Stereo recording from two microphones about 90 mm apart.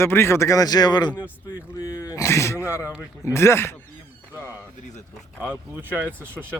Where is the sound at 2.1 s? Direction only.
35° left (ahead or behind).